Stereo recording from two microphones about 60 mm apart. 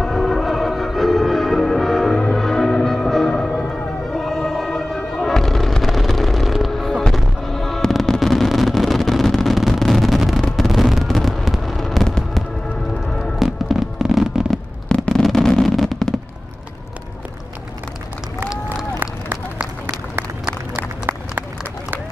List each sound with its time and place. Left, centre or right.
0.0 s music: centre
10.4 s fireworks: centre
14.9 s fireworks: centre
15.2 s a sound: centre
18.9 s run: right
21.0 s run: right